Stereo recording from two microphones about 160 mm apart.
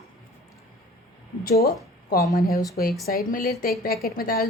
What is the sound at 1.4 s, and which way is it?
Speech, 75° left (ahead or behind).